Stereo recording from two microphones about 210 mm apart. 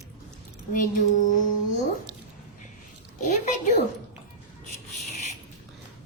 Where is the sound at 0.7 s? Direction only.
40° left (ahead or behind).